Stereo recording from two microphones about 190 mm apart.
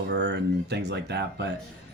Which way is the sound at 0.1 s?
60° right (ahead or behind).